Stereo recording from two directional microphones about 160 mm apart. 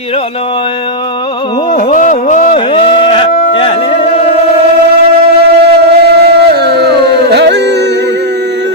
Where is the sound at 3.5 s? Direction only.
35° left (ahead or behind).